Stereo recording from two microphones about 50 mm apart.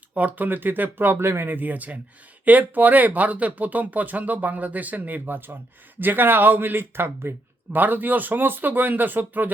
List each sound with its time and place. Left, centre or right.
0.1 s speech: right